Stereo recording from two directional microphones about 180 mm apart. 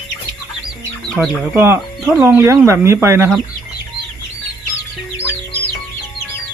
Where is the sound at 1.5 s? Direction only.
15° right (ahead or behind).